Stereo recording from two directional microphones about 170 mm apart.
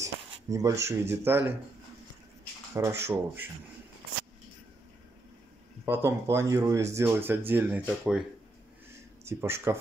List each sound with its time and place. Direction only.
0.0 s speech: 20° right (ahead or behind)
2.7 s speech: 15° right (ahead or behind)
5.9 s speech: 15° right (ahead or behind)
8.9 s a sound: 15° right (ahead or behind)